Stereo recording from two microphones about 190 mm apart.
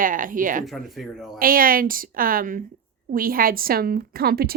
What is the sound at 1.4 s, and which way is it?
A woman's voice, 50° right (ahead or behind).